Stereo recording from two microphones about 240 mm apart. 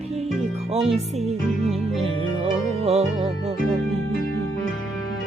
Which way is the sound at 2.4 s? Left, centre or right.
Right.